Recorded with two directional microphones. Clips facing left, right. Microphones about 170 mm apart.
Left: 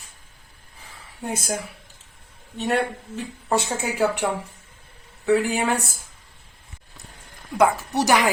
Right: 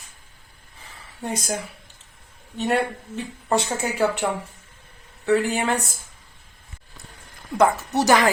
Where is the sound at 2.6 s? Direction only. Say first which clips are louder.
Right 1 dB; centre (ahead or behind).